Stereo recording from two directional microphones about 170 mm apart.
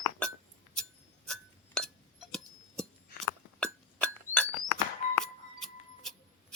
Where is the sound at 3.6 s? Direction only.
5° left (ahead or behind).